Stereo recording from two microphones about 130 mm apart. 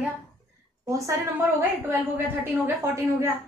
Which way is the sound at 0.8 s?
25° right (ahead or behind).